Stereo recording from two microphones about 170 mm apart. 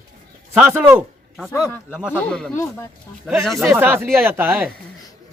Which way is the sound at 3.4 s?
Centre (ahead or behind).